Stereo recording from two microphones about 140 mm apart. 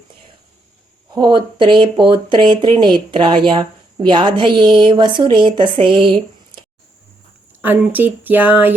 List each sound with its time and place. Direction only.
1.1 s speech: 35° right (ahead or behind)
7.6 s speech: 15° right (ahead or behind)